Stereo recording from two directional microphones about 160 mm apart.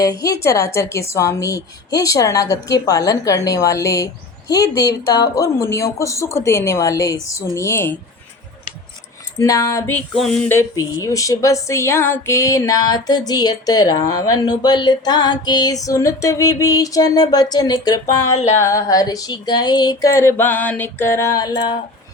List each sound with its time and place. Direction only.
0.0 s speech: 20° left (ahead or behind)
9.4 s speech: 20° left (ahead or behind)
10.2 s a sound: centre (ahead or behind)
10.5 s speech: 20° left (ahead or behind)